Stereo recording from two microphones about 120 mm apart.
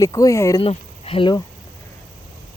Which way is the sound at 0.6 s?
55° left (ahead or behind).